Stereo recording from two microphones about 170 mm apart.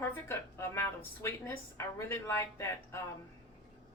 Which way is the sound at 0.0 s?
15° left (ahead or behind).